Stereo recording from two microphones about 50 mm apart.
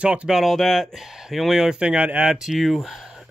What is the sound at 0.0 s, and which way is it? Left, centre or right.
Speech, right.